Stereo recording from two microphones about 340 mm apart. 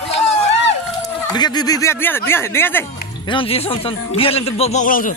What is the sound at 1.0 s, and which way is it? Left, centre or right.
Speech, centre.